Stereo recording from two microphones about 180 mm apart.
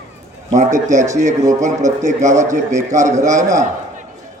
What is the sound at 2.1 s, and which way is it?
Speech, 40° right (ahead or behind).